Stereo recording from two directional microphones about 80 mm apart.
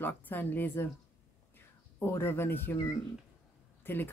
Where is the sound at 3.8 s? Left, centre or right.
Left.